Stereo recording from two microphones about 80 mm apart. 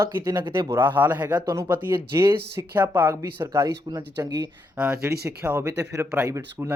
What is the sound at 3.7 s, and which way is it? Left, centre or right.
Speech, right.